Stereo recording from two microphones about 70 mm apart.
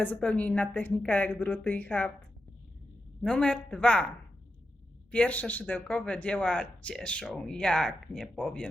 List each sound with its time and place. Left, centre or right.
0.2 s a woman's voice: centre
3.2 s speech: centre
5.1 s speech: left